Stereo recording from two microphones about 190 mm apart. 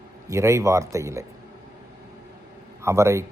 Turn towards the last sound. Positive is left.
turn(degrees=-15)  # may be behind; listen again after turning